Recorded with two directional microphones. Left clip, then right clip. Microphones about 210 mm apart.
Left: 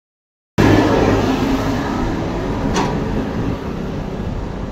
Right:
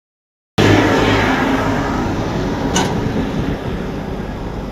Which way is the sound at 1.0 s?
15° right (ahead or behind).